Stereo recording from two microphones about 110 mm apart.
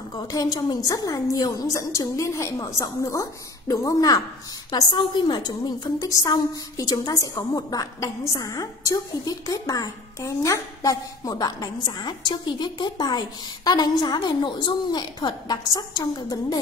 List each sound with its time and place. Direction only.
0.1 s a woman's voice: 35° left (ahead or behind)